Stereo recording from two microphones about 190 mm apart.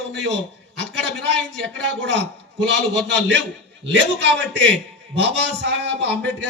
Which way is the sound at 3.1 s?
70° right (ahead or behind).